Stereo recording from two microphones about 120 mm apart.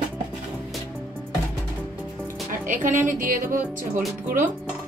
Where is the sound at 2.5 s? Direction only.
90° right.